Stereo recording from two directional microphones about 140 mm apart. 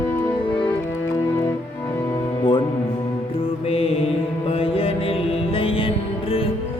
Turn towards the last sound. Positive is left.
turn(degrees=40)  # may be behind; listen again after turning